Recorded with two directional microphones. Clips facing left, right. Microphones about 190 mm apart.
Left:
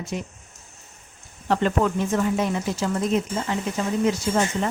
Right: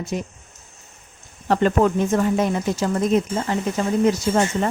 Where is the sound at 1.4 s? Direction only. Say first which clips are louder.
Right 4 dB; 45° right (ahead or behind).